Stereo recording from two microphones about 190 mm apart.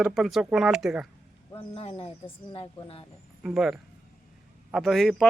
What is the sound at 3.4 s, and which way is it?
Speech, 5° right (ahead or behind).